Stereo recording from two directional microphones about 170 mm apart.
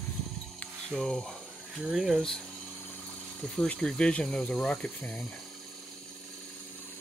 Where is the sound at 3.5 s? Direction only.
5° left (ahead or behind).